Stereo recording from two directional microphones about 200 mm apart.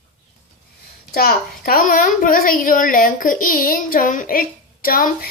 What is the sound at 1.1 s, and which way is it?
A woman's voice, 45° left (ahead or behind).